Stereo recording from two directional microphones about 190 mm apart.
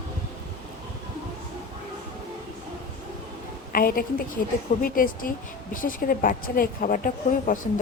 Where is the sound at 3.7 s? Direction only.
50° left (ahead or behind).